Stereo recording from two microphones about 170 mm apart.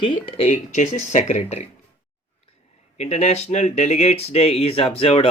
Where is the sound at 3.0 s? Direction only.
40° left (ahead or behind).